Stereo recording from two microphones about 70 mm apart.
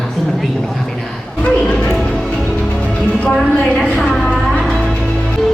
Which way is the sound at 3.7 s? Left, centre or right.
Centre.